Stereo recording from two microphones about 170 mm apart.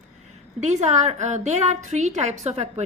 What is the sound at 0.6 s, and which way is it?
A woman's voice, 45° right (ahead or behind).